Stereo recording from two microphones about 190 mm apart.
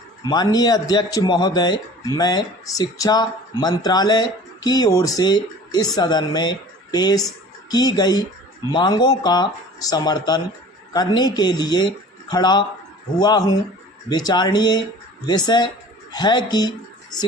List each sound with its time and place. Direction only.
0.3 s speech: 20° left (ahead or behind)